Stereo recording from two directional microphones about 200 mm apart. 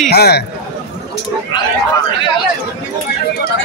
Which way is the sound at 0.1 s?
55° left (ahead or behind).